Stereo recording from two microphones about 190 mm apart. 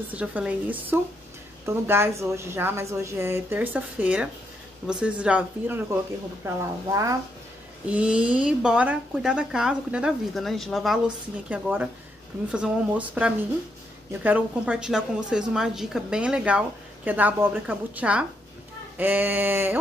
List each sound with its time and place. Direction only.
0.1 s a woman's voice: 5° right (ahead or behind)
7.9 s a woman's voice: 5° right (ahead or behind)